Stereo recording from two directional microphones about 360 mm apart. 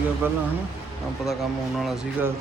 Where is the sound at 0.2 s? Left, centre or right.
Centre.